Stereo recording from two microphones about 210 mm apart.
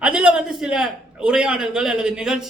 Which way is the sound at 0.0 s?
5° right (ahead or behind).